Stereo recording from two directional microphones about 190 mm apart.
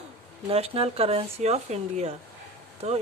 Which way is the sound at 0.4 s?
30° right (ahead or behind).